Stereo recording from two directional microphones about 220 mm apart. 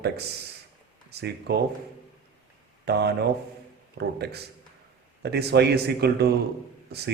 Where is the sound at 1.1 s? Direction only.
50° right (ahead or behind).